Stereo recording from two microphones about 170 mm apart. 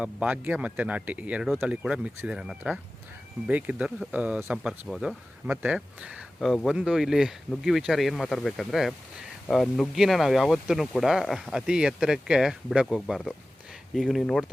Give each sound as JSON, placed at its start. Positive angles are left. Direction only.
{"t": 0.0, "sound": "speech", "side_deg": -10}